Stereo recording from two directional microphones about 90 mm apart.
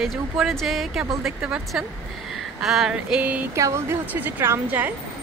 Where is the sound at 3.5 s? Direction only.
35° right (ahead or behind).